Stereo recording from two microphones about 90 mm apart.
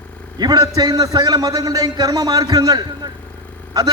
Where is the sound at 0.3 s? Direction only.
45° right (ahead or behind).